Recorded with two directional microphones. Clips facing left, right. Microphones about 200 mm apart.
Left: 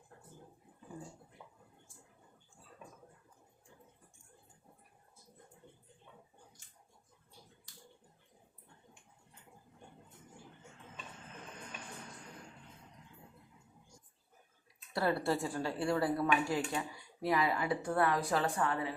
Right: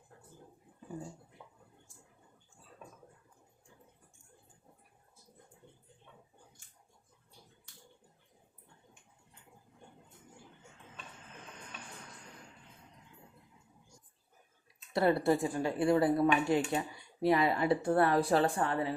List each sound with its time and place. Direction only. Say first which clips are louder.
14.9 s speech: right 5 dB; 20° right (ahead or behind)